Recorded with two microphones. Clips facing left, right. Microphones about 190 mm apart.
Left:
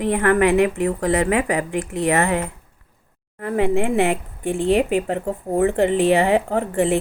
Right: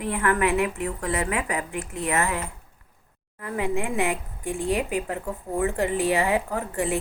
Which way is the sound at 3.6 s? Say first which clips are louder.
Left 7 dB; 70° left (ahead or behind).